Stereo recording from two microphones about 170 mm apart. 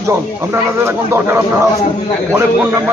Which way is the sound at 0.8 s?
15° right (ahead or behind).